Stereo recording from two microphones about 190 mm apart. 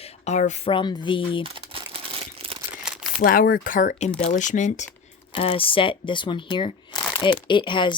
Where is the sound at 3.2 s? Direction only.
50° left (ahead or behind).